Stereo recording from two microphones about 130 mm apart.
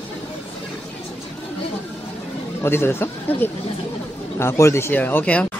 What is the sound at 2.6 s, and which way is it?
Speech, 15° left (ahead or behind).